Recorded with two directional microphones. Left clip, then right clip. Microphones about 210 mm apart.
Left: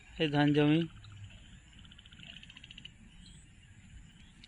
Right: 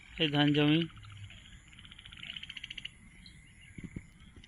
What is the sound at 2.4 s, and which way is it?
Bird, 50° left (ahead or behind).